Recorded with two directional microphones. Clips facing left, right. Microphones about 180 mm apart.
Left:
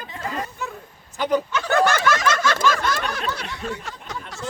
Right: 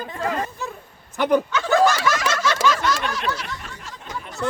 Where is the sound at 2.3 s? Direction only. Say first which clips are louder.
Even; 50° left (ahead or behind).